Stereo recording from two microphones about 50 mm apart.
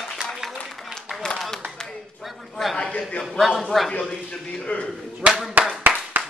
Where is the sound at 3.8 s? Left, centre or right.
Centre.